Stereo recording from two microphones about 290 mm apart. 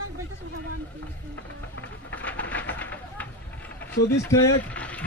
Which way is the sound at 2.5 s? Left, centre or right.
Centre.